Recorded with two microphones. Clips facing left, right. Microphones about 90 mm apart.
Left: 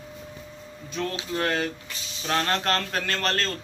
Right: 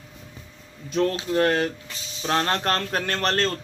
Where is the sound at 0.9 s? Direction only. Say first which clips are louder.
Right 7 dB; 45° right (ahead or behind).